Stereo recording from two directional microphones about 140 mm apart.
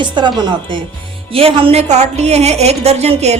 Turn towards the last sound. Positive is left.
turn(degrees=-50)  # may be behind; listen again after turning